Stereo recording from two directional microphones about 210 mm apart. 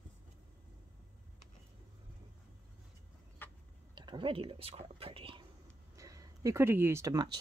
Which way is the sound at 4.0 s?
25° right (ahead or behind).